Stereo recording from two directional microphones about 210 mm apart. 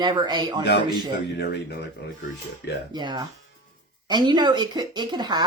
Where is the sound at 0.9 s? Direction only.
20° right (ahead or behind).